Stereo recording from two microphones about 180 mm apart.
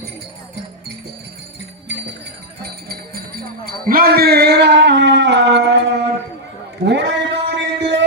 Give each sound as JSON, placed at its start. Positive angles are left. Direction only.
{"t": 1.9, "sound": "music", "side_deg": -75}
{"t": 2.9, "sound": "music", "side_deg": -55}
{"t": 3.8, "sound": "speech", "side_deg": -55}
{"t": 6.8, "sound": "a sound", "side_deg": -75}